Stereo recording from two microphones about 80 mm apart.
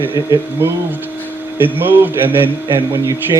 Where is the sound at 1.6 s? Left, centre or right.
Right.